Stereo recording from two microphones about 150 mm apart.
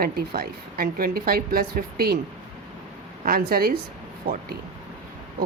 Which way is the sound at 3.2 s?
85° right.